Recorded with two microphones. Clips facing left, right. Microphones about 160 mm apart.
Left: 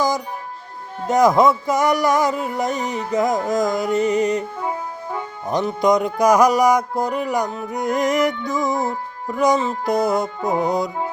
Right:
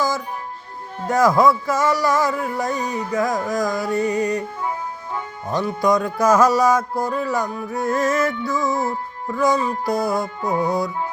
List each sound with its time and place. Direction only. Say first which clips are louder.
1.0 s music: left 1 dB; 20° left (ahead or behind)
5.5 s music: left 2 dB; 20° left (ahead or behind)